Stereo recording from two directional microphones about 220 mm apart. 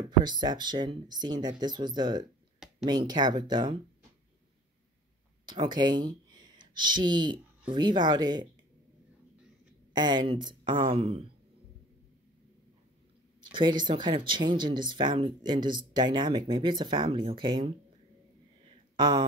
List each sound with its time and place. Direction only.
0.2 s speech: 20° right (ahead or behind)
5.4 s speech: 20° right (ahead or behind)
9.9 s speech: 20° right (ahead or behind)
13.4 s speech: 20° right (ahead or behind)
18.9 s speech: 20° right (ahead or behind)